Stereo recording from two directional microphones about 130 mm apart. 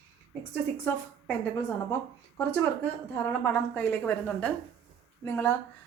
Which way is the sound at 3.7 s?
10° left (ahead or behind).